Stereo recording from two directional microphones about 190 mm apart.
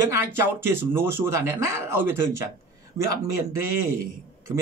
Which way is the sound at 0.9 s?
15° right (ahead or behind).